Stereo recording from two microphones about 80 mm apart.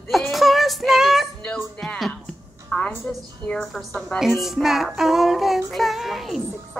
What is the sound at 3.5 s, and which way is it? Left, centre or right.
Child singing, centre.